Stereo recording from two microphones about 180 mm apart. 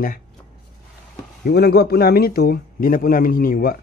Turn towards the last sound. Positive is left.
turn(degrees=55)  # may be behind; listen again after turning